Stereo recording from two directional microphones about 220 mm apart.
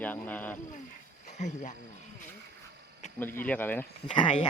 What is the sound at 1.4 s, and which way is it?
Speech, 30° left (ahead or behind).